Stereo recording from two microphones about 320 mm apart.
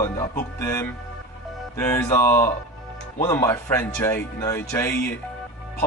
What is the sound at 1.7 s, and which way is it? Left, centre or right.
A man's voice, centre.